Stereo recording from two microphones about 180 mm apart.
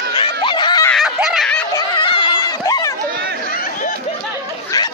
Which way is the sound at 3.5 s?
50° left (ahead or behind).